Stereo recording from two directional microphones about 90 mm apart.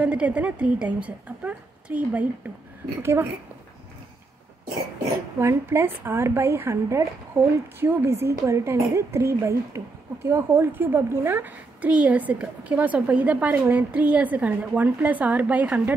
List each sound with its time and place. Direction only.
0.0 s a woman's voice: 15° right (ahead or behind)
3.0 s a woman's voice: 30° right (ahead or behind)
5.4 s a woman's voice: 30° right (ahead or behind)